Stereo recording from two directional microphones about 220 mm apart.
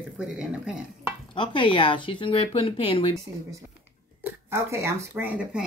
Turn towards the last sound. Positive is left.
turn(degrees=-10)  # may be behind; listen again after turning